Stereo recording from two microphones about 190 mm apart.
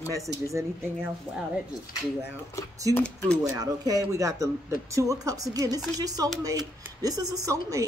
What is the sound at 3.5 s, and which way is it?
A woman's voice, 20° right (ahead or behind).